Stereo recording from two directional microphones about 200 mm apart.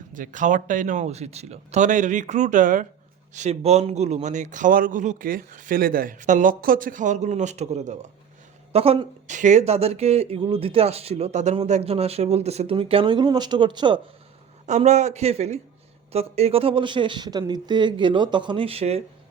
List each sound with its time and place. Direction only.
0.1 s speech: 40° right (ahead or behind); by 14.0 s 25° right (ahead or behind)
14.7 s speech: 35° right (ahead or behind)